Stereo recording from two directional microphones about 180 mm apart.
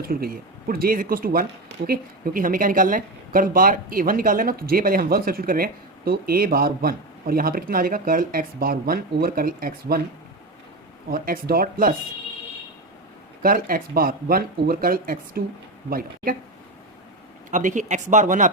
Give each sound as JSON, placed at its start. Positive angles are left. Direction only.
{"t": 0.0, "sound": "a woman's voice", "side_deg": -55}
{"t": 11.1, "sound": "a woman's voice", "side_deg": -55}
{"t": 13.4, "sound": "a woman's voice", "side_deg": -50}
{"t": 17.5, "sound": "a woman's voice", "side_deg": -45}